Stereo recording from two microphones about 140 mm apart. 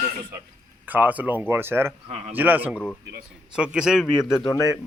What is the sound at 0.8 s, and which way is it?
Speech, 10° right (ahead or behind).